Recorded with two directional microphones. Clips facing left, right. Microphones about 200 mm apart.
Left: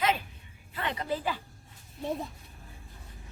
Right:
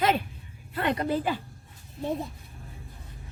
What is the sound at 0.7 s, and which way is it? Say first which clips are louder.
Speech: right 6 dB; 55° right (ahead or behind).